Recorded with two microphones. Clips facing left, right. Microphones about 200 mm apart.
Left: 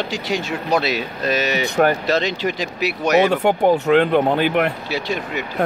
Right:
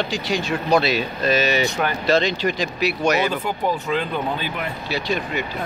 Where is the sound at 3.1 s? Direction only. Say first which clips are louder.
Left 7 dB; 70° left (ahead or behind).